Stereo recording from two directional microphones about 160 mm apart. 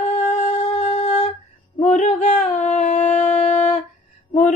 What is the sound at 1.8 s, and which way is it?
Shofar, 45° left (ahead or behind).